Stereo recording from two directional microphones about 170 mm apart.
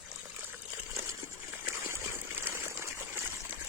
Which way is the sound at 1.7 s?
15° right (ahead or behind).